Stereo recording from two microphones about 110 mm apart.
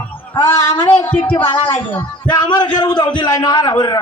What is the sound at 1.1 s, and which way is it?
A man's voice, 50° left (ahead or behind).